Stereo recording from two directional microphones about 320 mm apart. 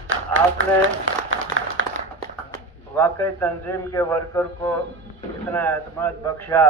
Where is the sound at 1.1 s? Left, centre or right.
Right.